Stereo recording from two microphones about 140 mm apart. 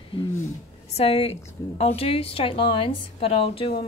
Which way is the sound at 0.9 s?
45° left (ahead or behind).